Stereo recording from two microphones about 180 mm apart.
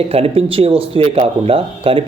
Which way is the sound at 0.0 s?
35° right (ahead or behind).